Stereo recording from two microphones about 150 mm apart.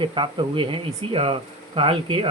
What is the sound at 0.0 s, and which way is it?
Speech, 35° right (ahead or behind).